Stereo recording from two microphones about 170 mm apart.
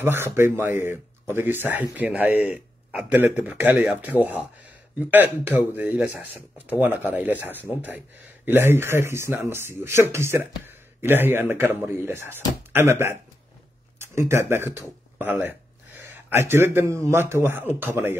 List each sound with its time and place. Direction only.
0.0 s speech: 15° right (ahead or behind)
13.9 s a sound: 15° right (ahead or behind)
14.5 s speech: 15° right (ahead or behind)